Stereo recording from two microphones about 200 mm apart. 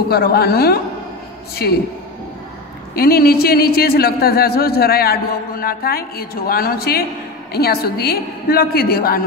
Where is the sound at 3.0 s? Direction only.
50° left (ahead or behind).